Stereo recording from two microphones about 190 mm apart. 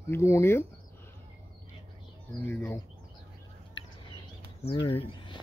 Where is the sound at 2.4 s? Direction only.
10° left (ahead or behind).